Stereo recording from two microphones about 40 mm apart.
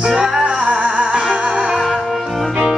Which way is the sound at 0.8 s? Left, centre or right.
Centre.